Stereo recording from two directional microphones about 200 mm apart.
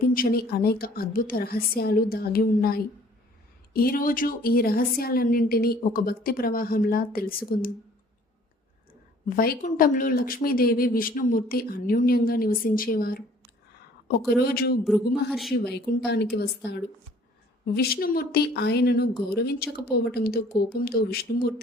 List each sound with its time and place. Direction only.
0.1 s speech: 45° left (ahead or behind)
9.3 s speech: 45° left (ahead or behind)
14.8 s a sound: centre (ahead or behind)
15.6 s speech: 55° left (ahead or behind)